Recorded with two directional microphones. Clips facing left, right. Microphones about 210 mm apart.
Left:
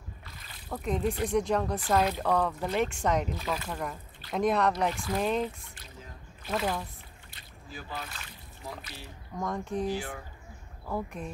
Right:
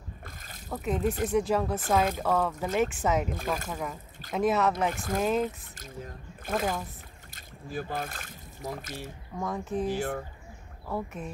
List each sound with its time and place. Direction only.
0.2 s a sound: 45° right (ahead or behind)
0.7 s speech: 5° right (ahead or behind)
3.3 s speech: 50° right (ahead or behind)
3.7 s speech: centre (ahead or behind)
4.9 s speech: 45° right (ahead or behind)
5.2 s speech: 5° right (ahead or behind)
6.4 s speech: 45° right (ahead or behind)
9.4 s speech: 5° right (ahead or behind)
9.9 s speech: 45° right (ahead or behind)
10.9 s speech: centre (ahead or behind)